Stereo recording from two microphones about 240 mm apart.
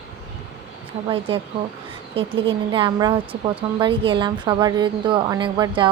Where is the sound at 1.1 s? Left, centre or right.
Right.